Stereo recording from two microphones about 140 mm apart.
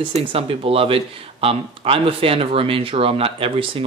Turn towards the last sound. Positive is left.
turn(degrees=-40)  # may be behind; listen again after turning